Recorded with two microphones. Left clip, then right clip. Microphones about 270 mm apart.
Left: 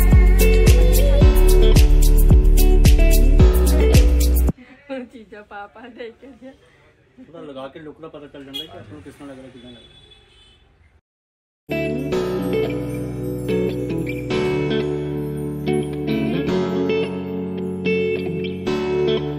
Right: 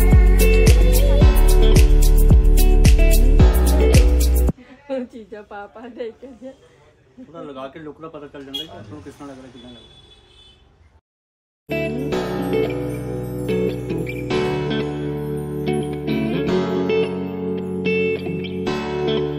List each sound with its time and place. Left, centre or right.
0.0 s music: centre
4.8 s a sound: right
7.5 s a man's voice: centre
11.6 s music: centre